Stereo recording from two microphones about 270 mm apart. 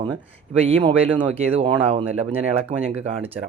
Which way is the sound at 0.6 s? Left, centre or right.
Centre.